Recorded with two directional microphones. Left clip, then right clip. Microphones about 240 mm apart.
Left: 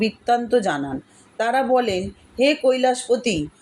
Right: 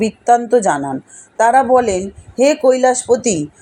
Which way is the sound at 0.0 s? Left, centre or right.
Centre.